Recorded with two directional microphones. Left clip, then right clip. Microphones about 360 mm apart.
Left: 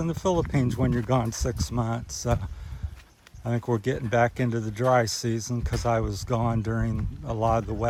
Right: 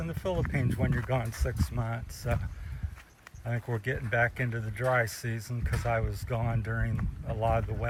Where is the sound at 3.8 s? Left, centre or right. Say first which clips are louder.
Left 4 dB; centre.